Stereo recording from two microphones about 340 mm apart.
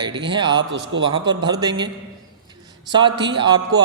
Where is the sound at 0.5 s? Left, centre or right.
Right.